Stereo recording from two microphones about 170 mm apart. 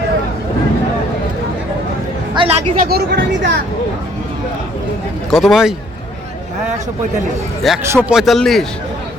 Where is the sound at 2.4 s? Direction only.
30° right (ahead or behind).